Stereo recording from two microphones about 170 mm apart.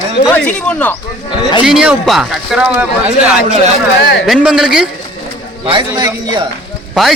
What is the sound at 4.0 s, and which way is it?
Speech, 90° left.